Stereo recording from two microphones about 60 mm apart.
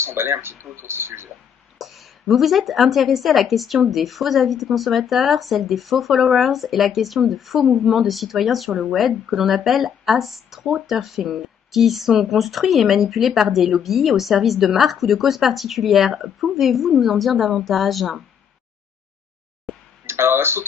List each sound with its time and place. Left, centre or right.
0.0 s speech: right
1.8 s a woman's voice: centre
20.1 s a sound: right